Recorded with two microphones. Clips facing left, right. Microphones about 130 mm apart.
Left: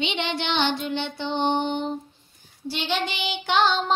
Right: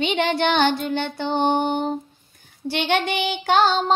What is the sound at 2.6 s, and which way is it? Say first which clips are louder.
Music: right 5 dB; 60° right (ahead or behind).